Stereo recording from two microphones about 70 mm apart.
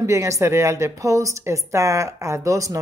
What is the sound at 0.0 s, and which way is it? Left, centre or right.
A woman's voice, right.